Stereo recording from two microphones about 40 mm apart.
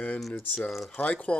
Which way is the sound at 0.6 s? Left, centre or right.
Centre.